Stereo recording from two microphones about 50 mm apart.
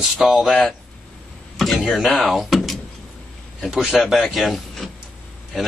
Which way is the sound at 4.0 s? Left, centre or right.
Centre.